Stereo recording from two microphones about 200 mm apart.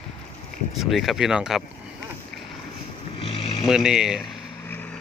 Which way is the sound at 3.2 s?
30° left (ahead or behind).